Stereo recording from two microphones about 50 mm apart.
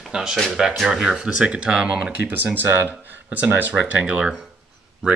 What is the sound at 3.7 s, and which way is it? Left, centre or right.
Speech, right.